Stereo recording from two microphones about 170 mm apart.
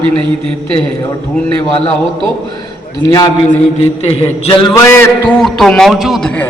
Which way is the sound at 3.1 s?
20° left (ahead or behind).